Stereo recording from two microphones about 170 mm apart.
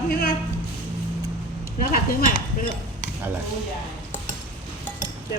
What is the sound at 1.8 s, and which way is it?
Speech, 55° left (ahead or behind).